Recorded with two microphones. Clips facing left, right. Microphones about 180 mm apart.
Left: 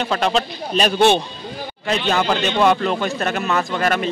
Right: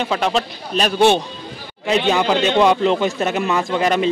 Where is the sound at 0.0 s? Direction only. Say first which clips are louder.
Even; 10° right (ahead or behind).